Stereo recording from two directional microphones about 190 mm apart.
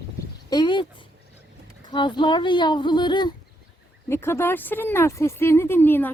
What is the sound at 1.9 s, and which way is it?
Speech, 25° left (ahead or behind).